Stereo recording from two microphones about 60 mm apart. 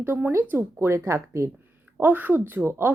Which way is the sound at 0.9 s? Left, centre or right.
Right.